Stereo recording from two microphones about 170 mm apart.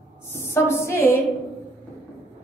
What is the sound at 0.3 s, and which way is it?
Speech, 15° left (ahead or behind).